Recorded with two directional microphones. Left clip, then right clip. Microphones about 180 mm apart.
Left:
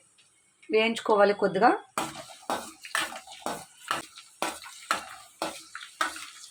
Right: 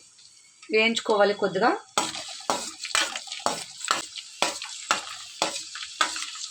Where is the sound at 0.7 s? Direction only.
Centre (ahead or behind).